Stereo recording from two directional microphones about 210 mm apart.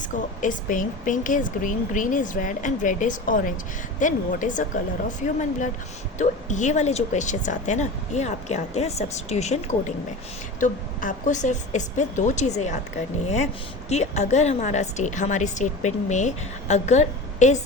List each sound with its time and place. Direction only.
0.4 s a woman's voice: 40° left (ahead or behind)
10.6 s a woman's voice: 35° left (ahead or behind)